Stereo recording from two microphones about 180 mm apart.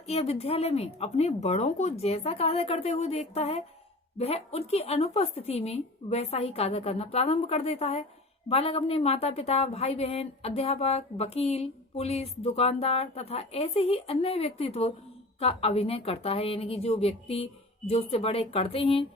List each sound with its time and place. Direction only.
0.1 s a woman's voice: 35° left (ahead or behind)